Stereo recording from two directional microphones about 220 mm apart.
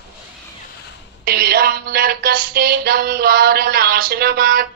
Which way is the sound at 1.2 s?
45° right (ahead or behind).